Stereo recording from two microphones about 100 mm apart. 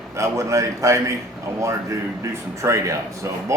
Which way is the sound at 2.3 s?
30° right (ahead or behind).